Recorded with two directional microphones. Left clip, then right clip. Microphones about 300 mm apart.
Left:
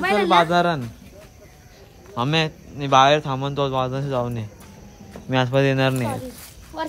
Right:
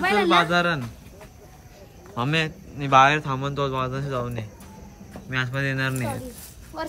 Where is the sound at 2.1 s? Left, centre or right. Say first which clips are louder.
Left 3 dB; centre.